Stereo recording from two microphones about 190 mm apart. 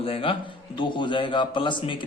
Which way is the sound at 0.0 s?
30° left (ahead or behind).